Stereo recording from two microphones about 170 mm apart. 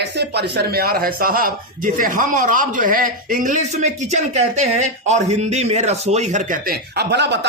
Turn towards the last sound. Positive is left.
turn(degrees=-90)